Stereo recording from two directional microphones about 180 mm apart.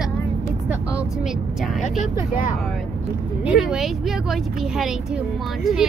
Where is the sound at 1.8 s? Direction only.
40° left (ahead or behind).